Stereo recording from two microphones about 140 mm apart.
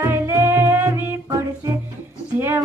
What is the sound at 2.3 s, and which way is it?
Music, 15° right (ahead or behind).